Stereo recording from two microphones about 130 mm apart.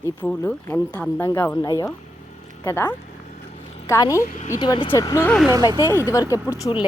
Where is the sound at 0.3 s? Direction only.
15° left (ahead or behind).